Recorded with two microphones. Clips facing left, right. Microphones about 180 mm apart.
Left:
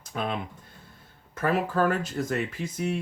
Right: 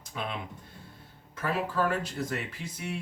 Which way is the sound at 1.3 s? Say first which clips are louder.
Left 5 dB; 50° left (ahead or behind).